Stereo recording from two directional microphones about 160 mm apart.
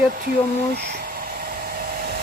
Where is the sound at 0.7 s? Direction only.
90° right; by 2.2 s 70° right (ahead or behind).